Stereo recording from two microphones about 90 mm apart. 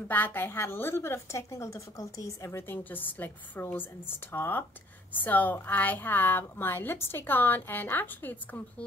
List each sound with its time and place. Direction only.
0.1 s a woman's voice: 20° left (ahead or behind)